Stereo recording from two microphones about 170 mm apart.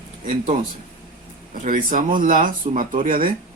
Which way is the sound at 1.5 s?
50° right (ahead or behind).